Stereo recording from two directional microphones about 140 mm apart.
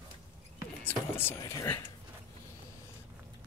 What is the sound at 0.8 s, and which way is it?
Speech, 15° left (ahead or behind).